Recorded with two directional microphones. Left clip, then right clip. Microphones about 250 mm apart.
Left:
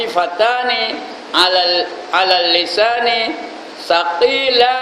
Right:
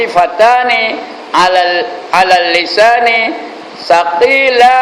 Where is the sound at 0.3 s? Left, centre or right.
Centre.